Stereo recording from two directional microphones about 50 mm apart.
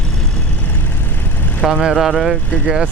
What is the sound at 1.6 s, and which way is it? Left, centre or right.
Speech, centre.